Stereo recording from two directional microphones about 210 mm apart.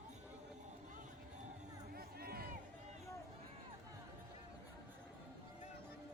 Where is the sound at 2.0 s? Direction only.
45° right (ahead or behind).